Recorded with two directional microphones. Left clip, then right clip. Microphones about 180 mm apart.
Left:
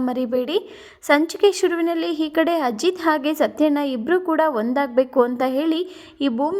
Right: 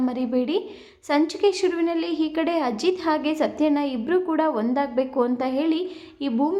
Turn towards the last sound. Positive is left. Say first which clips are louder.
# left 3 dB
turn(degrees=35)  # may be behind; listen again after turning